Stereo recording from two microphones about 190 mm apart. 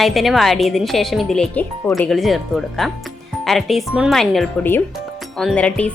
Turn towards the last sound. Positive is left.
turn(degrees=5)  # may be behind; listen again after turning